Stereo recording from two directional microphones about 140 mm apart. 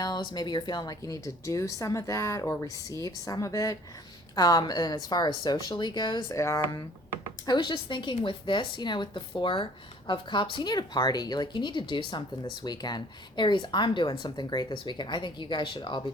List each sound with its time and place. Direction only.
0.0 s speech: 30° left (ahead or behind)
7.4 s speech: 35° left (ahead or behind)